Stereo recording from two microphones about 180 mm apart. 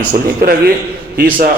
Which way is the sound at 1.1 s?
55° right (ahead or behind).